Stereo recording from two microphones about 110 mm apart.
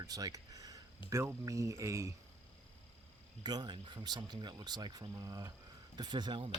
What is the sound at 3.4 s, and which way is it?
Speech, 40° right (ahead or behind).